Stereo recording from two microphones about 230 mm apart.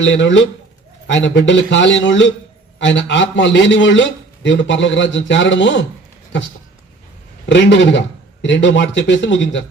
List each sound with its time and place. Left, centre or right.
0.0 s a man's voice: left
7.4 s a man's voice: left